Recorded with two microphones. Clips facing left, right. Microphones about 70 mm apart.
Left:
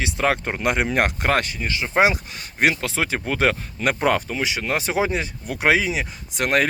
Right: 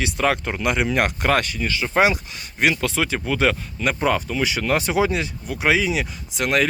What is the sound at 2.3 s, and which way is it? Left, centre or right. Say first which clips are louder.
Speech: even; left.